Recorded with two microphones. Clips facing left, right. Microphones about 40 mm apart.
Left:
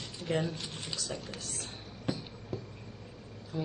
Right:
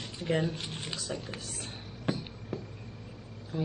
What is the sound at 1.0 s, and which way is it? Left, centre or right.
Speech, centre.